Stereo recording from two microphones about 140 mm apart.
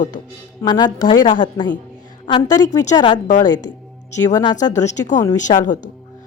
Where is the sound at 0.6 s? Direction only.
30° left (ahead or behind).